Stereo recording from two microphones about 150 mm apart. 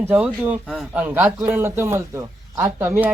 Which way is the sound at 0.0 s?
10° right (ahead or behind).